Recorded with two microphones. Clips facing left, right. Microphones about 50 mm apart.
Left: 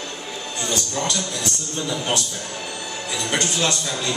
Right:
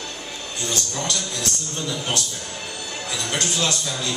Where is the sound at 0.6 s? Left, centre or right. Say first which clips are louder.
Left 2 dB; centre.